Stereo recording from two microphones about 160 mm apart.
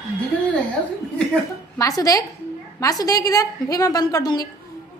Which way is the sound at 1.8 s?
20° left (ahead or behind).